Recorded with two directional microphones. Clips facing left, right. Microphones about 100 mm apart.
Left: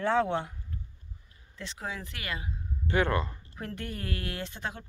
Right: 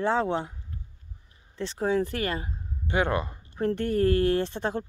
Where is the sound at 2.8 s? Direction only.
20° right (ahead or behind).